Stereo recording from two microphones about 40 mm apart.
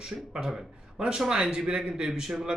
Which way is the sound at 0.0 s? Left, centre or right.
Centre.